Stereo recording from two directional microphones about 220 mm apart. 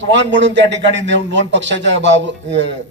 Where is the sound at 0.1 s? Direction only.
55° right (ahead or behind).